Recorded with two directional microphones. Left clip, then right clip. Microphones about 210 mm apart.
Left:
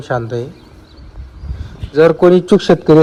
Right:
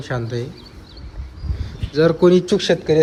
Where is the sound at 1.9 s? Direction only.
5° right (ahead or behind).